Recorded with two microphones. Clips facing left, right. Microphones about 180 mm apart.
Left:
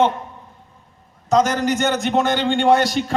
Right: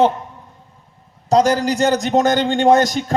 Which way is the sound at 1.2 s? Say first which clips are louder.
Right 3 dB; 35° right (ahead or behind).